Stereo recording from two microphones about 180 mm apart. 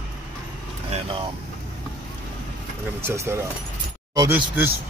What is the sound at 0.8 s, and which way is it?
Speech, 35° right (ahead or behind).